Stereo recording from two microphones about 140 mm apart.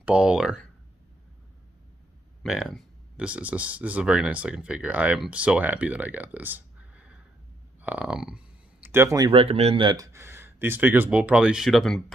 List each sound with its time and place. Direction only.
0.0 s speech: 5° right (ahead or behind)
2.4 s speech: 5° right (ahead or behind)
8.8 s speech: 20° right (ahead or behind)
9.2 s speech: 40° right (ahead or behind)
9.8 s speech: 25° right (ahead or behind); by 12.0 s centre (ahead or behind)